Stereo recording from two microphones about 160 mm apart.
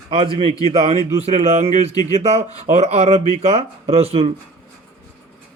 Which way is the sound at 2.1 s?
45° right (ahead or behind).